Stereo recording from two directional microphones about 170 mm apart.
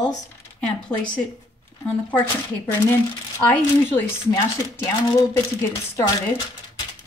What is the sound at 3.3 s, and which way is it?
Speech, 15° left (ahead or behind).